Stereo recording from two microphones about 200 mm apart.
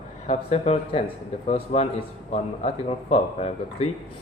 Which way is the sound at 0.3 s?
30° left (ahead or behind).